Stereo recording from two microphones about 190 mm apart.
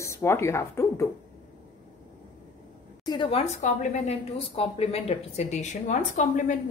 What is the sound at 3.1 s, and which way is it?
Speech, 25° left (ahead or behind).